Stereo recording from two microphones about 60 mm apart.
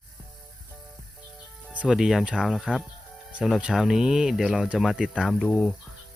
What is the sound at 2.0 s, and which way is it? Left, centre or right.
Speech, centre.